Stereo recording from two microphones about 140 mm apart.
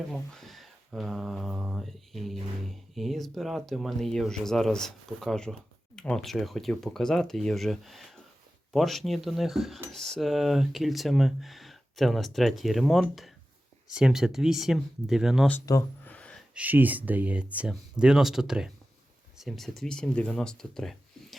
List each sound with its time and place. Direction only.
0.1 s speech: centre (ahead or behind)
15.7 s speech: 25° left (ahead or behind)
16.0 s gasp: 10° left (ahead or behind)
16.6 s speech: 10° right (ahead or behind)